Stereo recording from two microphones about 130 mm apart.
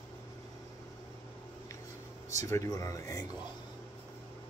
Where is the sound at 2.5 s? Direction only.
25° left (ahead or behind).